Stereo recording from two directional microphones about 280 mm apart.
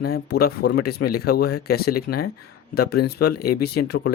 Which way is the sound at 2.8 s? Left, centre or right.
Left.